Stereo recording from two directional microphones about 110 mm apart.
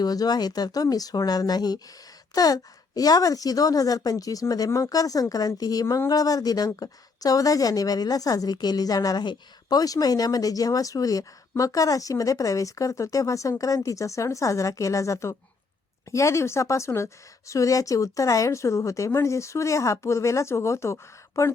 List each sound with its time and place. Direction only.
0.0 s a woman's voice: 35° left (ahead or behind)